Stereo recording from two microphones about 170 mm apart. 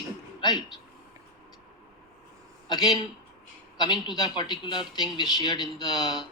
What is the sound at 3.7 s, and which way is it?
Speech, 25° left (ahead or behind).